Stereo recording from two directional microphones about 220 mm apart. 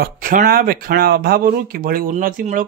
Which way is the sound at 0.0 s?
40° right (ahead or behind).